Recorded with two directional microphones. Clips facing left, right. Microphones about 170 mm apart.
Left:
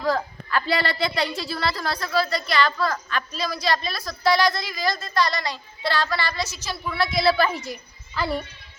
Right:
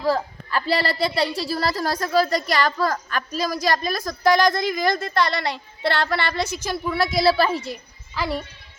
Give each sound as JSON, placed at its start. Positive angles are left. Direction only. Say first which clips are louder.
{"t": 0.5, "sound": "a woman's voice", "louder": "right 1 dB", "side_deg": -35}
{"t": 6.9, "sound": "a woman's voice", "louder": "right 2 dB", "side_deg": -40}
{"t": 8.1, "sound": "a child's voice", "louder": "even", "side_deg": -15}